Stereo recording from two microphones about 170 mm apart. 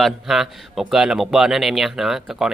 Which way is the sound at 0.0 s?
Centre (ahead or behind).